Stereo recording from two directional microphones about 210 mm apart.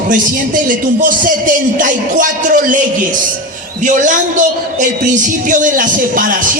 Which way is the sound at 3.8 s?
40° right (ahead or behind).